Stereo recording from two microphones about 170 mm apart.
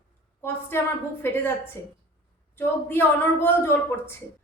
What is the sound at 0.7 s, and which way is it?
A woman's voice, 15° left (ahead or behind).